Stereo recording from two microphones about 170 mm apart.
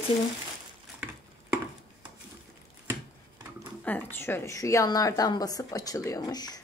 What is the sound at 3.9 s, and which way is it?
A woman's voice, 10° left (ahead or behind).